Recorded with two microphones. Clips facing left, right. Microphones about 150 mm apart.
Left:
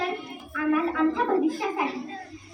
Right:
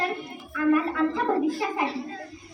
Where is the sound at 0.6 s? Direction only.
Centre (ahead or behind).